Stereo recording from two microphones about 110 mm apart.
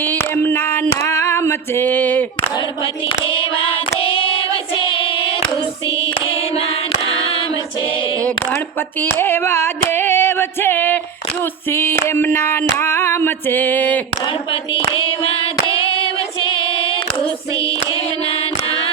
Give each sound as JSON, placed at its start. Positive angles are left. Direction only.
{"t": 0.0, "sound": "female singing", "side_deg": 20}
{"t": 3.2, "sound": "child singing", "side_deg": 55}
{"t": 4.9, "sound": "singing", "side_deg": 50}
{"t": 7.2, "sound": "female singing", "side_deg": 60}
{"t": 9.0, "sound": "female singing", "side_deg": 20}
{"t": 16.4, "sound": "female singing", "side_deg": 50}